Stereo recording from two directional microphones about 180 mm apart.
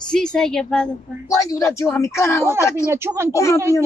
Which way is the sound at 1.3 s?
20° left (ahead or behind).